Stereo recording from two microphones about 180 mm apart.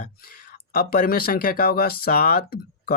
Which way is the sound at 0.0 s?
50° left (ahead or behind).